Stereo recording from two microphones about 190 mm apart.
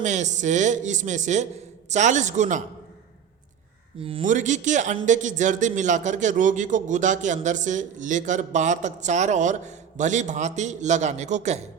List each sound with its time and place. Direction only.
0.0 s a man's voice: 40° right (ahead or behind)
4.0 s speech: 30° right (ahead or behind)
4.3 s a man's voice: 40° right (ahead or behind)